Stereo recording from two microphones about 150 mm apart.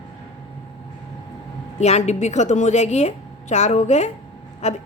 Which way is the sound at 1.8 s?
45° left (ahead or behind).